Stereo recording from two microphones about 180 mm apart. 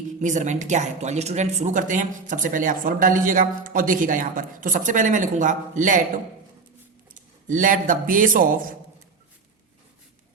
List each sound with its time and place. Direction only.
0.2 s speech: 45° right (ahead or behind)
7.1 s speech: 45° right (ahead or behind)